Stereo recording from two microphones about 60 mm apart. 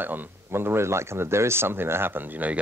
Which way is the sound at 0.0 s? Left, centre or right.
Right.